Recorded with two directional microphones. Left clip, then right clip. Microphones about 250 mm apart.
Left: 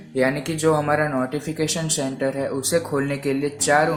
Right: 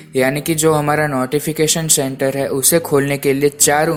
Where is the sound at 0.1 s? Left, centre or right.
Right.